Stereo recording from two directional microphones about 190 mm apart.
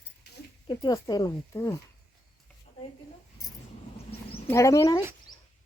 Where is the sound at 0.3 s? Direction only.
55° left (ahead or behind).